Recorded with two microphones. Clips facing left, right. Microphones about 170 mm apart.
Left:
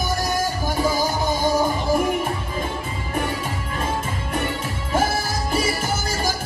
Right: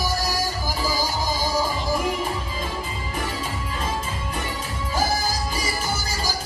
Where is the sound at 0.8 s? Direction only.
60° left (ahead or behind).